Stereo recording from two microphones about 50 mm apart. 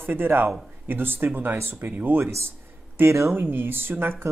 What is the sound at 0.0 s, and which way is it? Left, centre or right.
Speech, right.